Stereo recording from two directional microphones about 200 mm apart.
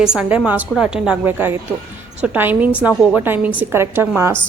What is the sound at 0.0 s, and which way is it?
A woman's voice, 5° right (ahead or behind).